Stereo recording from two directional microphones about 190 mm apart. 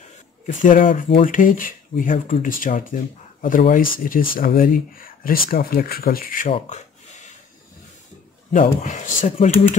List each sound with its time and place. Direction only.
0.5 s speech: 45° left (ahead or behind)
6.5 s a sound: 40° left (ahead or behind)
8.5 s speech: 40° left (ahead or behind)